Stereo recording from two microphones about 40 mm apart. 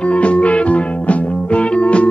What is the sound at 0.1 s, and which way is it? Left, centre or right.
Music, left.